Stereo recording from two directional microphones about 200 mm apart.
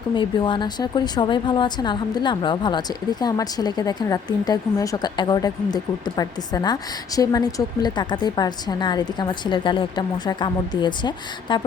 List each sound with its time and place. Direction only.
0.1 s a woman's voice: 25° left (ahead or behind)